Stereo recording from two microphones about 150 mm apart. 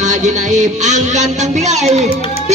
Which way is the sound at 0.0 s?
55° right (ahead or behind).